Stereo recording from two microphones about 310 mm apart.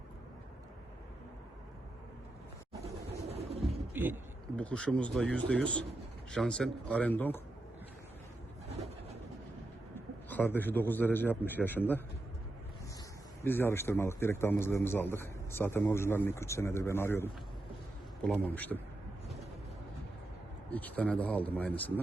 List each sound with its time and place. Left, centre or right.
2.8 s a sound: centre
3.6 s bird: centre
4.5 s speech: centre
10.2 s a man's voice: centre
13.4 s a man's voice: centre
20.7 s speech: centre